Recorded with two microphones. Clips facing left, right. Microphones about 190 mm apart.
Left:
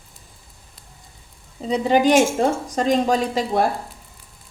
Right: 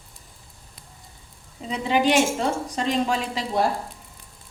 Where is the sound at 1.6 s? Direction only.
35° left (ahead or behind).